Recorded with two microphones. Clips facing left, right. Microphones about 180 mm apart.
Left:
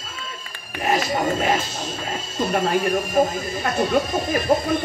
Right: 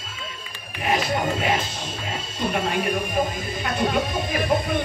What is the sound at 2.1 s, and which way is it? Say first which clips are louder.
Speech: left 3 dB; 40° left (ahead or behind).